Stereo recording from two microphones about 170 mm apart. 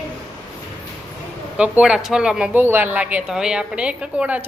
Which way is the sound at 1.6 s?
5° right (ahead or behind).